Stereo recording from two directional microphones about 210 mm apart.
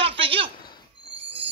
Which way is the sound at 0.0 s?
25° right (ahead or behind).